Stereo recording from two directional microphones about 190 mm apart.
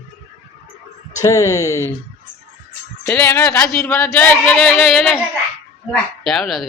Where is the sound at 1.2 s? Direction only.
15° left (ahead or behind).